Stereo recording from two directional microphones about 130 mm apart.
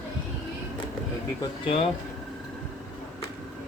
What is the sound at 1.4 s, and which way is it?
Speech, 40° left (ahead or behind).